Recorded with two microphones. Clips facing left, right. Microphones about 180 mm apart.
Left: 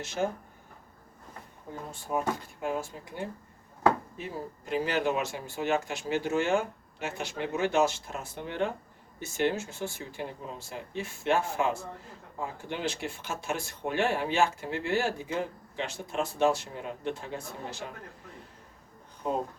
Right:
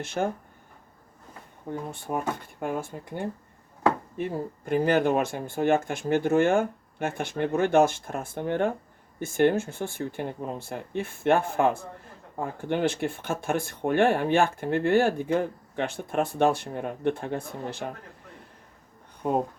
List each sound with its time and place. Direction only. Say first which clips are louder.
0.0 s speech: right 2 dB; 55° right (ahead or behind)
1.9 s speech: left 2 dB; 55° right (ahead or behind)